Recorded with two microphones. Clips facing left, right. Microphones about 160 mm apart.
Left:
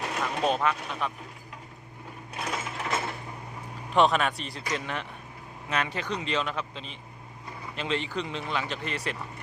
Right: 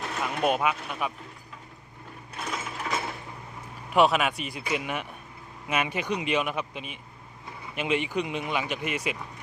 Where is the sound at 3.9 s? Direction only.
5° right (ahead or behind).